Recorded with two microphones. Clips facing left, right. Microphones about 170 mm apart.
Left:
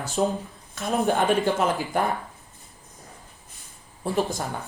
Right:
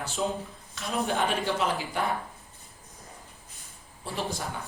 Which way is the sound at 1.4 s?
45° left (ahead or behind).